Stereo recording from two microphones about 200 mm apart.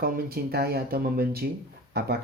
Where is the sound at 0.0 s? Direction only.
50° right (ahead or behind).